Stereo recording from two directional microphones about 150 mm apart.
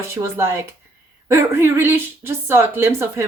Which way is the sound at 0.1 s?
15° right (ahead or behind).